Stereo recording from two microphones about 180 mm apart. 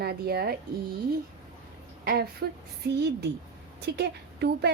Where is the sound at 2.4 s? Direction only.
65° right (ahead or behind).